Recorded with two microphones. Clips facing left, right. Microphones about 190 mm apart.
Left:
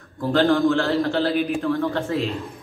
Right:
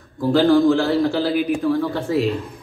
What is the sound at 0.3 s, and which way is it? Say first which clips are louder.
A man's voice: right 4 dB; centre (ahead or behind).